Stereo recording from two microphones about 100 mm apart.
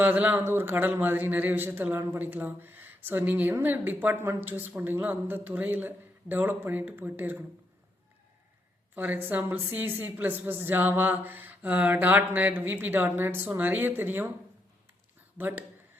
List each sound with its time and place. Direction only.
0.0 s a man's voice: 15° right (ahead or behind)
9.0 s a man's voice: 20° right (ahead or behind)
15.4 s a man's voice: 20° right (ahead or behind)